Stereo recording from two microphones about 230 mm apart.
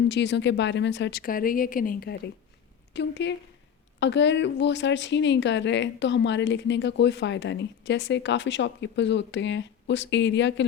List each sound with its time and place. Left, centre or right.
0.1 s a woman's voice: left